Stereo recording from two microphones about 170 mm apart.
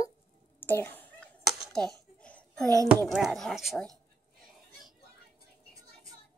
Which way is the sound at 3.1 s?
Centre (ahead or behind).